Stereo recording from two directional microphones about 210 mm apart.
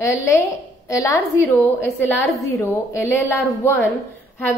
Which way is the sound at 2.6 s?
10° left (ahead or behind).